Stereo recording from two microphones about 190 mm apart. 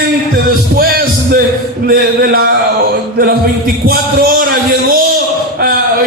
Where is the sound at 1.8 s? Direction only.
50° right (ahead or behind).